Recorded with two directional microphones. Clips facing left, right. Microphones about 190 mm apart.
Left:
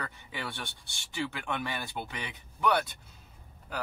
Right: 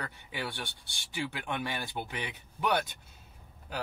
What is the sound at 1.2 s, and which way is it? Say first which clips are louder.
Speech: even; 15° right (ahead or behind).